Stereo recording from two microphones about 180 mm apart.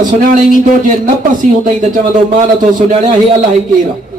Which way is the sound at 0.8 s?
45° right (ahead or behind).